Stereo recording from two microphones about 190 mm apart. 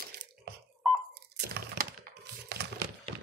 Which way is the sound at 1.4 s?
60° right (ahead or behind).